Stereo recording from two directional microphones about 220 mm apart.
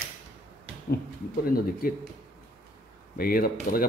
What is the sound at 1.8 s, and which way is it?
Speech, 40° left (ahead or behind).